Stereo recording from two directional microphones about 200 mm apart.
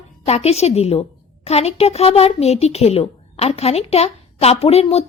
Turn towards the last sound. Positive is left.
turn(degrees=30)  # may be behind; listen again after turning